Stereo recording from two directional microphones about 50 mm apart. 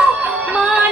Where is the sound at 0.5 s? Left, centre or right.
Right.